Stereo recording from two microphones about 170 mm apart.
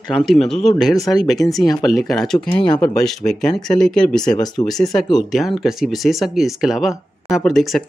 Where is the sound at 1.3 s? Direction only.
Centre (ahead or behind).